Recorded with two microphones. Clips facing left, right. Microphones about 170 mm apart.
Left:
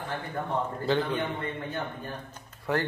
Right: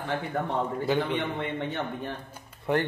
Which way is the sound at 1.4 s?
90° right.